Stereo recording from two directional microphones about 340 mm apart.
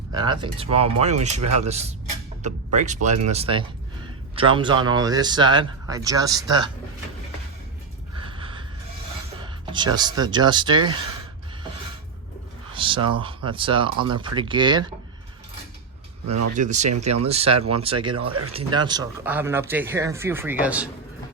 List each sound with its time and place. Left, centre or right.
0.1 s speech: centre
8.1 s a sound: centre
9.4 s speech: centre
12.7 s speech: centre
16.6 s speech: right; by 20.8 s centre